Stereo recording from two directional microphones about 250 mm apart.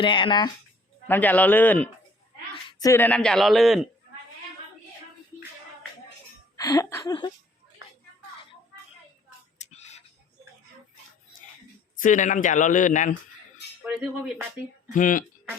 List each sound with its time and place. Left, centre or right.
0.0 s speech: centre
1.0 s a man's voice: centre
6.6 s a man's voice: centre
9.6 s whispering: left
11.9 s speech: left
13.8 s speech: centre
14.9 s speech: left